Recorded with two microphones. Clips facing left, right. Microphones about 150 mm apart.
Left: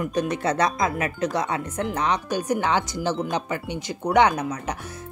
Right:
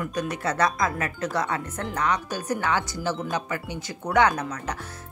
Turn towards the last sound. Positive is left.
turn(degrees=15)  # may be behind; listen again after turning